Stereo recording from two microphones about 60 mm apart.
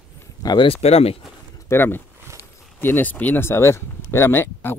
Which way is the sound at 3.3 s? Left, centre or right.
Left.